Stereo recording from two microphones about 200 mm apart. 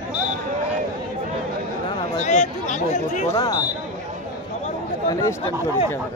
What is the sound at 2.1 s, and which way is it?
Chatter, 35° left (ahead or behind).